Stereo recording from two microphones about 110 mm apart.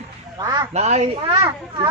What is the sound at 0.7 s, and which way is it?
Speech, 90° right.